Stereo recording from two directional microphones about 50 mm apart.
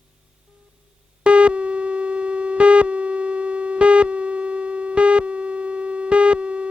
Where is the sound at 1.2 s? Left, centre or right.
Right.